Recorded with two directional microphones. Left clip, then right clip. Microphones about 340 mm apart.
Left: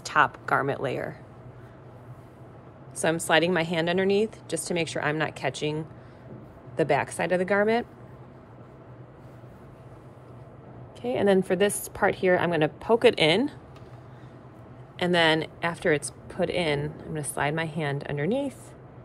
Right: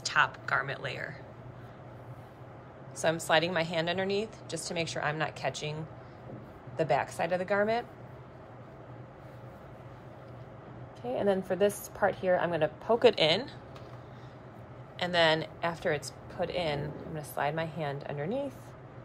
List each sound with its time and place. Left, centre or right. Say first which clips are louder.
0.0 s speech: left 5 dB; centre
3.0 s speech: left 4 dB; centre
11.1 s speech: left 6 dB; centre
15.0 s speech: left 4 dB; centre